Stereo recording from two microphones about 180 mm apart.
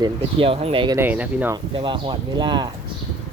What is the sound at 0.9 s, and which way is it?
Speech, 10° right (ahead or behind).